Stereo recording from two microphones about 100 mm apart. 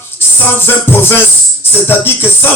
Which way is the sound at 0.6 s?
25° left (ahead or behind).